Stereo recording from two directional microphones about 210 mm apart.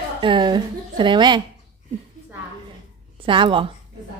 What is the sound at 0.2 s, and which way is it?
A woman's voice, 20° right (ahead or behind).